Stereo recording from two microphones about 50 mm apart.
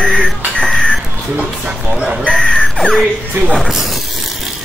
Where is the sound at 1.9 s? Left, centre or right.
Centre.